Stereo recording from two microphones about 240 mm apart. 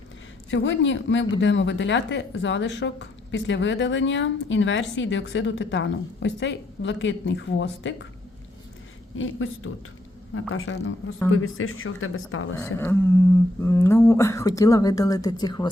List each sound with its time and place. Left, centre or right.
0.5 s speech: left
9.1 s speech: left
10.5 s a woman's voice: left
12.5 s speech: centre